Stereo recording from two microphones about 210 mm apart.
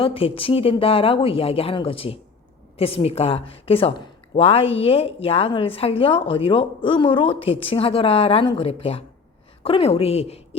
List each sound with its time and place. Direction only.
0.0 s a woman's voice: 25° left (ahead or behind)